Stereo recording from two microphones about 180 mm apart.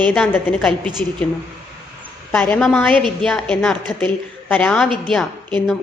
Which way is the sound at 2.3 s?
5° left (ahead or behind).